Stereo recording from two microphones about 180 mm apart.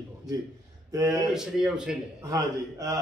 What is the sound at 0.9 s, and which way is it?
Speech, 20° right (ahead or behind).